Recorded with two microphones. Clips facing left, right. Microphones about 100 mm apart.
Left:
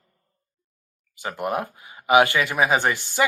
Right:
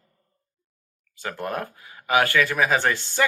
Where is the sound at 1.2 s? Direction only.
15° left (ahead or behind).